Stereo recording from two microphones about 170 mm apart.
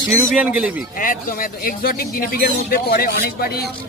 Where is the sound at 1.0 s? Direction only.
55° left (ahead or behind).